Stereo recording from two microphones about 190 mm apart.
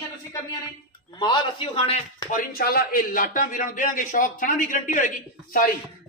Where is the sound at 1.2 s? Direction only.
25° left (ahead or behind).